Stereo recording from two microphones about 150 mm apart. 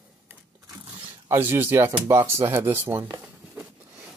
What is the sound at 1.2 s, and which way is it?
Speech, 15° right (ahead or behind).